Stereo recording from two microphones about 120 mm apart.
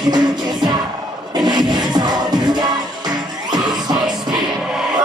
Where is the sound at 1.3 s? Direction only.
35° right (ahead or behind).